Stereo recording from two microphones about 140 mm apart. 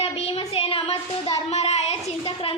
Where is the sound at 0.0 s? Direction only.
45° left (ahead or behind).